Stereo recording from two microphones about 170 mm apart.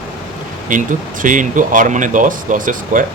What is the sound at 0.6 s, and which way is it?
Speech, 50° right (ahead or behind).